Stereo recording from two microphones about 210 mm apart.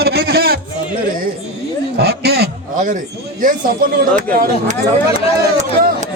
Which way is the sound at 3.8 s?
45° right (ahead or behind).